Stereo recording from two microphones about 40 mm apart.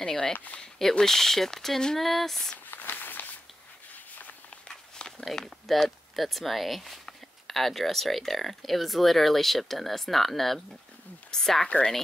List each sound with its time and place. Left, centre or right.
0.3 s speech: left
0.9 s speech: centre
2.7 s walk: left
3.9 s a sound: left
4.5 s walk: centre
5.2 s speech: centre
11.6 s a woman's voice: left